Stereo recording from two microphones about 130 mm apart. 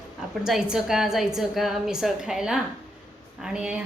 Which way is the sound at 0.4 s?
5° right (ahead or behind).